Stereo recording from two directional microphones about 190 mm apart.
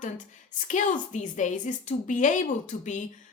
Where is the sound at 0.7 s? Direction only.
40° left (ahead or behind).